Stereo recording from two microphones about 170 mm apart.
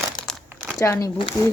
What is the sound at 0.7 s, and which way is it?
Speech, 15° left (ahead or behind).